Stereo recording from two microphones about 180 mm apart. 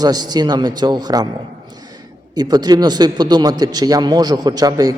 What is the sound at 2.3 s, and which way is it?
A man's voice, 20° right (ahead or behind).